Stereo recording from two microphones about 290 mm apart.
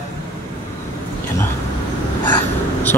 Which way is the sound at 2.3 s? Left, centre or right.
Centre.